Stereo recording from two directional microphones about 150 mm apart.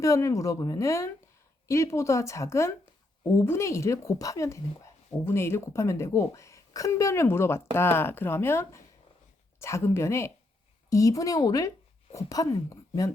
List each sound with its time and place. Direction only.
0.0 s speech: 20° left (ahead or behind)